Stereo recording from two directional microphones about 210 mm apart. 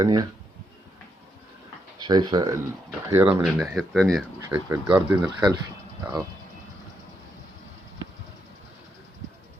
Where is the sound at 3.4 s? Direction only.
Centre (ahead or behind).